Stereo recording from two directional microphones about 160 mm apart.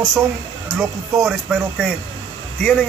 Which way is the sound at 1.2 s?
Centre (ahead or behind).